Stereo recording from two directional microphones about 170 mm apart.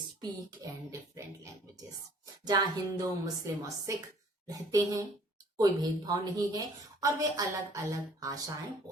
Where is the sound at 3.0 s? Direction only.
20° right (ahead or behind).